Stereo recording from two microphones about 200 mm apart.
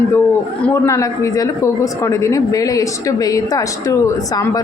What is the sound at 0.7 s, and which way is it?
Speech, 15° left (ahead or behind).